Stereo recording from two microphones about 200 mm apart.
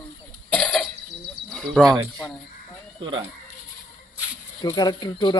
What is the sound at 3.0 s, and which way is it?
Speech, 25° right (ahead or behind).